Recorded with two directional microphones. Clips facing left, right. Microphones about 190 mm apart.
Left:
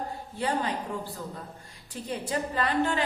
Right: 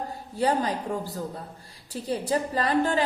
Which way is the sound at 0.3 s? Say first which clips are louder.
Right 4 dB; 40° right (ahead or behind).